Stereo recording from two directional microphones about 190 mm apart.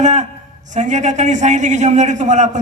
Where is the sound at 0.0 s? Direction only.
40° right (ahead or behind).